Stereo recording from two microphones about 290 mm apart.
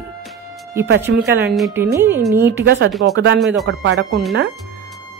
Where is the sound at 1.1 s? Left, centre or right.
Right.